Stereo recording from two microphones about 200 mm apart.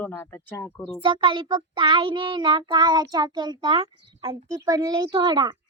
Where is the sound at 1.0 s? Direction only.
25° right (ahead or behind).